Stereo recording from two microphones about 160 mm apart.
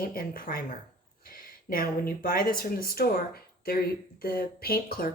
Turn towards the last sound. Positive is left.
turn(degrees=70)  # may be behind; listen again after turning